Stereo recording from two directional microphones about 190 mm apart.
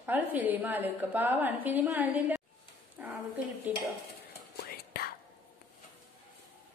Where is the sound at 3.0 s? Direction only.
10° right (ahead or behind).